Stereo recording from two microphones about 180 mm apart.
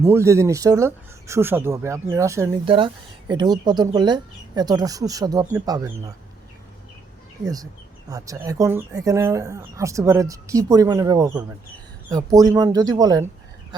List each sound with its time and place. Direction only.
0.0 s speech: 15° right (ahead or behind)
2.6 s speech: 30° right (ahead or behind)
7.4 s speech: 20° right (ahead or behind)